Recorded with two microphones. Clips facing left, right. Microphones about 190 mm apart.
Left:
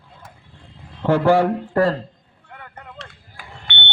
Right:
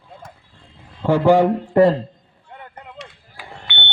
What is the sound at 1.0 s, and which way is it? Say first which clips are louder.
Speech: right 2 dB; 15° right (ahead or behind).